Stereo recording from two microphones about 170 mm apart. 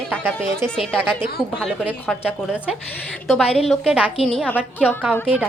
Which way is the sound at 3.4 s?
35° left (ahead or behind).